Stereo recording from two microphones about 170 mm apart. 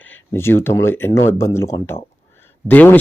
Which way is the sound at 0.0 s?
10° left (ahead or behind).